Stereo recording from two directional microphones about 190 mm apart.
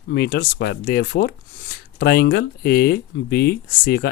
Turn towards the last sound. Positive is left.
turn(degrees=55)  # may be behind; listen again after turning